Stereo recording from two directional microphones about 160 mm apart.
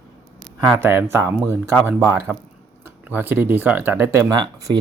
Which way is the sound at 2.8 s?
10° right (ahead or behind).